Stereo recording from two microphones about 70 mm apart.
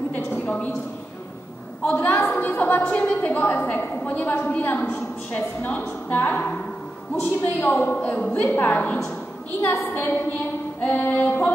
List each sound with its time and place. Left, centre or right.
1.8 s a woman's voice: left